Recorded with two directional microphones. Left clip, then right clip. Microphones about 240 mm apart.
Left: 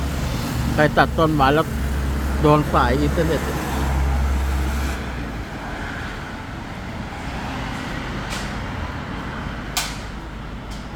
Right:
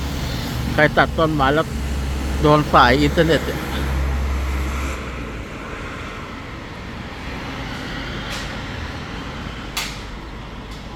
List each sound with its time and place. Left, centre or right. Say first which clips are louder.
0.8 s speech: right 1 dB; centre
2.7 s speech: right 6 dB; centre